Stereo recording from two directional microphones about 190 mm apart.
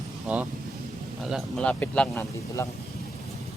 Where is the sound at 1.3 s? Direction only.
5° left (ahead or behind).